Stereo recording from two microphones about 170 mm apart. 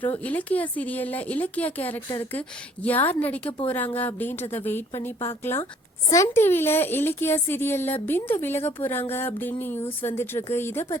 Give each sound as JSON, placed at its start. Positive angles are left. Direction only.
{"t": 0.1, "sound": "speech", "side_deg": 10}